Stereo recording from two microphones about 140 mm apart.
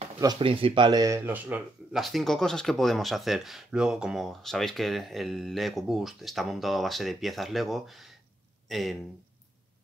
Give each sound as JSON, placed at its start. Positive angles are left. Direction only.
{"t": 0.4, "sound": "speech", "side_deg": -40}
{"t": 2.0, "sound": "speech", "side_deg": 0}